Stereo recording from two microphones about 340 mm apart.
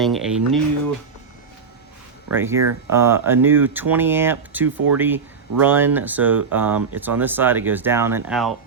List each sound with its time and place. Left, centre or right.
0.0 s speech: centre
2.3 s speech: centre